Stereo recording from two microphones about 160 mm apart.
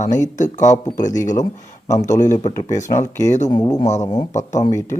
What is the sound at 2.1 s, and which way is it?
Speech, 50° left (ahead or behind).